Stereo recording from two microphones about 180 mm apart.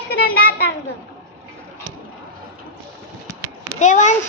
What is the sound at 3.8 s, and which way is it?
Speech, 40° left (ahead or behind).